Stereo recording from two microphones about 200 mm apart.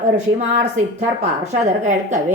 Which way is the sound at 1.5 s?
40° right (ahead or behind).